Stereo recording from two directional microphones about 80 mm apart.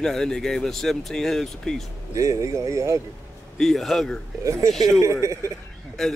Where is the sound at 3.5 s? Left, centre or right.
Centre.